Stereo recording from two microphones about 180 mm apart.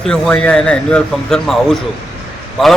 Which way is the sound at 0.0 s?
5° left (ahead or behind).